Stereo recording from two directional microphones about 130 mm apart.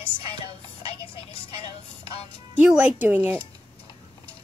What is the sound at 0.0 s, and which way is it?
Music, 45° left (ahead or behind).